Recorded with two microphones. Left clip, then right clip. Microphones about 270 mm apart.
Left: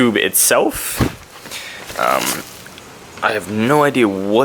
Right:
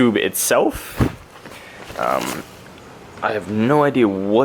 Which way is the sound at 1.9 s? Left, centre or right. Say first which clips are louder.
Left 4 dB; centre.